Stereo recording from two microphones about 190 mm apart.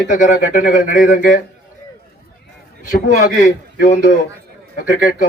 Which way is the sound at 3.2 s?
45° left (ahead or behind).